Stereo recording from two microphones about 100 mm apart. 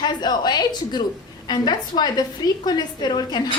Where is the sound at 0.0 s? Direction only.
45° left (ahead or behind).